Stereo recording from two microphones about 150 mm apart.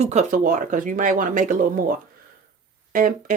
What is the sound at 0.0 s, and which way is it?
Speech, 50° right (ahead or behind).